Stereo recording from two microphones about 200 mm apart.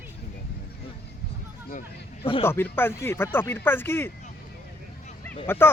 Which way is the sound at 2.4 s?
10° left (ahead or behind).